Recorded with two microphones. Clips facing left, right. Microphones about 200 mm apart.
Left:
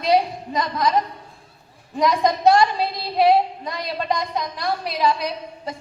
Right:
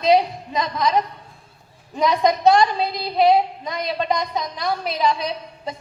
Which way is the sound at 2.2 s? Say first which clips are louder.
Right 1 dB; 20° right (ahead or behind).